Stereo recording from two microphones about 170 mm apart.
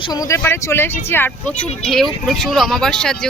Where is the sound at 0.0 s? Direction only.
20° left (ahead or behind).